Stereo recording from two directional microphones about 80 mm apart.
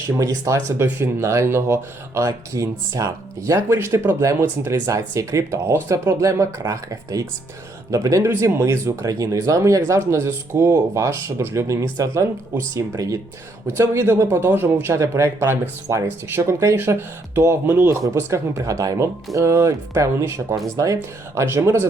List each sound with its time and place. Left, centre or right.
0.2 s speech: right
3.8 s speech: right
13.7 s speech: right